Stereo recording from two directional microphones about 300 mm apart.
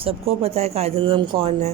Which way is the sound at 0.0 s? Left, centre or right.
Centre.